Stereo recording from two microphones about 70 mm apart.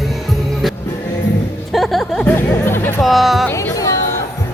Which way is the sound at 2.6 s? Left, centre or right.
Left.